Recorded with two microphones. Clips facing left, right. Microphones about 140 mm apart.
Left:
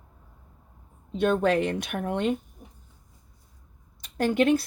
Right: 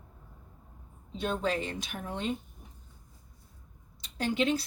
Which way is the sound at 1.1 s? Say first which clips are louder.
Left 9 dB; 60° left (ahead or behind).